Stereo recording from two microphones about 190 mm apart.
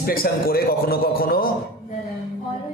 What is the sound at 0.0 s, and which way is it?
Speech, 50° left (ahead or behind).